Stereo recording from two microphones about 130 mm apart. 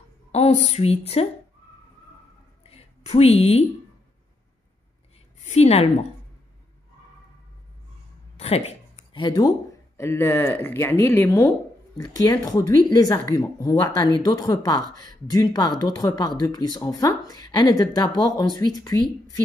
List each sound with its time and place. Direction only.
0.3 s a woman's voice: 60° left (ahead or behind)
2.6 s a sound: 50° left (ahead or behind)
5.4 s a woman's voice: 60° left (ahead or behind)
8.4 s a sound: 50° left (ahead or behind)
9.2 s speech: 35° left (ahead or behind)
9.9 s speech: 20° left (ahead or behind)
12.0 s speech: 30° left (ahead or behind)